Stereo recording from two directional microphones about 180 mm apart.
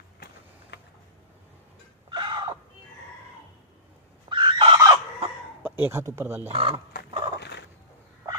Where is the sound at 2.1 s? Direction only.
25° right (ahead or behind).